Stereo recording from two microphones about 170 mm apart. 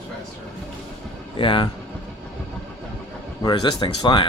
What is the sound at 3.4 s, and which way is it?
Speech, 25° left (ahead or behind).